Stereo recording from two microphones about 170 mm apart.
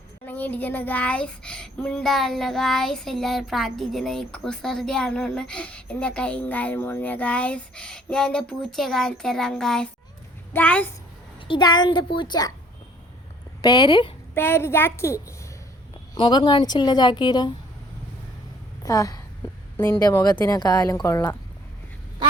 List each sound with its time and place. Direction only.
0.3 s a woman's voice: 10° left (ahead or behind)
11.3 s a woman's voice: 30° left (ahead or behind)
13.6 s a woman's voice: 25° left (ahead or behind)
14.3 s a woman's voice: 15° left (ahead or behind)
16.1 s a woman's voice: 30° left (ahead or behind)
18.8 s a sound: 20° left (ahead or behind)
19.7 s a woman's voice: 10° left (ahead or behind)